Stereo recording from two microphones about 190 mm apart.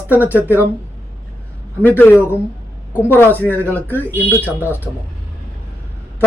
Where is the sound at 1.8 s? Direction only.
10° left (ahead or behind).